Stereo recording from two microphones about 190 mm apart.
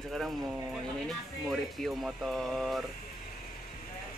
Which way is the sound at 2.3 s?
Centre (ahead or behind).